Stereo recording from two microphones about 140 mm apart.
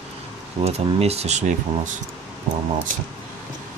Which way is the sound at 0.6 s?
50° right (ahead or behind).